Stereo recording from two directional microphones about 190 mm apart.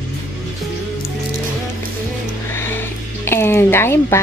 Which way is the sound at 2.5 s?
10° left (ahead or behind).